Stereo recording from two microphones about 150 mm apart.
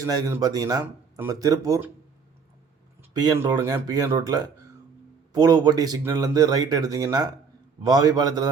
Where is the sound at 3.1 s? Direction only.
25° right (ahead or behind).